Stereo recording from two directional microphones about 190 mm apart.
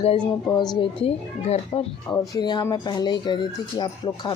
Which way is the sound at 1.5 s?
30° left (ahead or behind).